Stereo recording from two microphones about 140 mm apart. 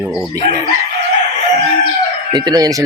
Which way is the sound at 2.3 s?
30° right (ahead or behind).